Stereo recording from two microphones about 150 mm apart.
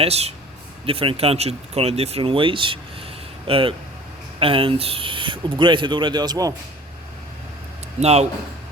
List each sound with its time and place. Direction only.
0.0 s speech: 45° right (ahead or behind); by 6.5 s 25° right (ahead or behind)
8.0 s speech: 45° right (ahead or behind)